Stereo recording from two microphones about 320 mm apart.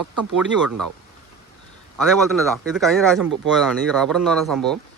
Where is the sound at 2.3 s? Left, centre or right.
Centre.